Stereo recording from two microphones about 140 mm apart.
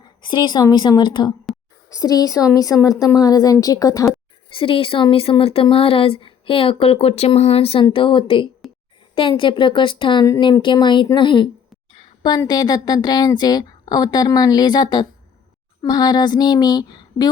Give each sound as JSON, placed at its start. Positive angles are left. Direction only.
{"t": 0.0, "sound": "a woman's voice", "side_deg": 30}
{"t": 4.5, "sound": "speech", "side_deg": 40}